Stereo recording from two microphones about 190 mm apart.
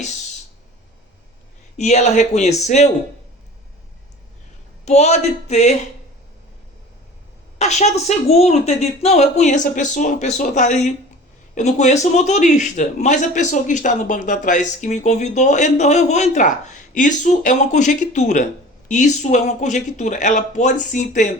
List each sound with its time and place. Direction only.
1.7 s a man's voice: 35° left (ahead or behind)
4.9 s a man's voice: 35° left (ahead or behind)
7.6 s a man's voice: 35° left (ahead or behind)